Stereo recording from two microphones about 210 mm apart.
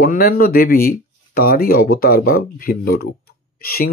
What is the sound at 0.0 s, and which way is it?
Speech, 45° left (ahead or behind).